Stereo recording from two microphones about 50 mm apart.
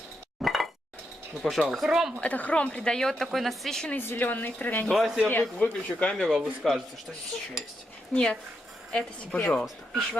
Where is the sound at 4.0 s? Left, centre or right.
Left.